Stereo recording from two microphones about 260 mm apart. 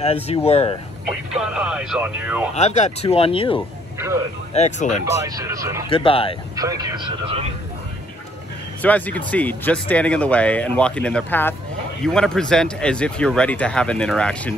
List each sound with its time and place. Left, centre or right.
0.0 s speech: left
1.3 s speech: centre
2.5 s speech: left
5.2 s speech: centre
5.9 s speech: centre
6.5 s speech: centre
8.8 s speech: centre